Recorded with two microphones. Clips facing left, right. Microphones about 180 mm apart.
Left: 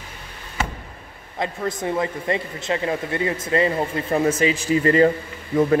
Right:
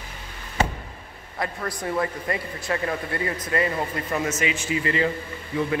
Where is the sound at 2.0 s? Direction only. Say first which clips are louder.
Left 3 dB; 20° left (ahead or behind).